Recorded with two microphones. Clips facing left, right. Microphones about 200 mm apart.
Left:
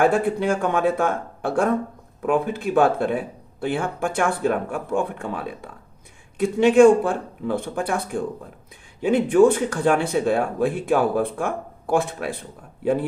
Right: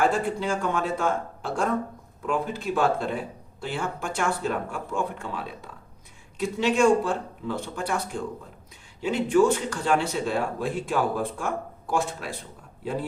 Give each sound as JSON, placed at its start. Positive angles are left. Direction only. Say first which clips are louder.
{"t": 0.0, "sound": "speech", "louder": "left 5 dB", "side_deg": 60}